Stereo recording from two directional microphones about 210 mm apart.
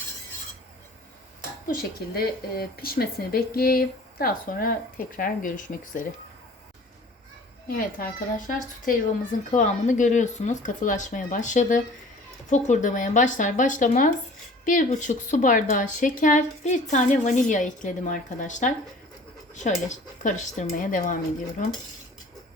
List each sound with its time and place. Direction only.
1.6 s speech: 45° left (ahead or behind)
7.7 s a woman's voice: 40° left (ahead or behind)